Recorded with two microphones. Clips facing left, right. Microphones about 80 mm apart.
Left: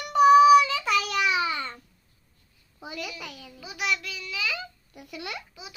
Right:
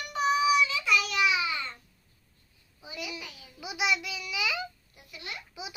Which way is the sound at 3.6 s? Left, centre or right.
Centre.